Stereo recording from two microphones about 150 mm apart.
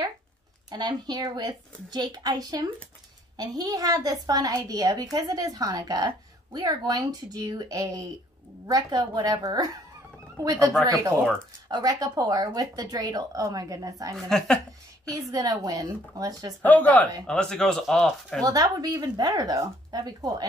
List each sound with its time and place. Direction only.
0.7 s a woman's voice: 30° right (ahead or behind)
11.7 s a woman's voice: 25° right (ahead or behind)
14.1 s speech: 5° left (ahead or behind)
15.0 s a woman's voice: 25° right (ahead or behind)
16.6 s speech: 10° left (ahead or behind)
18.4 s a woman's voice: 25° right (ahead or behind)